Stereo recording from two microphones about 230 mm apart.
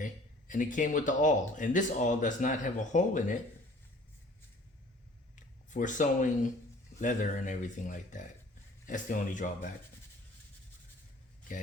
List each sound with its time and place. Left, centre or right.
0.0 s speech: left
5.7 s speech: left